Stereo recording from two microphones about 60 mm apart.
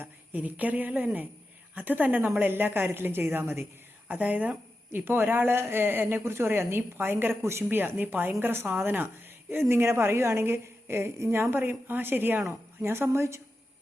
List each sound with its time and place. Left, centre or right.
0.0 s jingle bell: right
0.5 s speech: right
4.1 s a woman's voice: right
12.8 s a woman's voice: right